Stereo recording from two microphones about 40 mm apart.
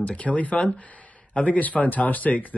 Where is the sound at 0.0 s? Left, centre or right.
Left.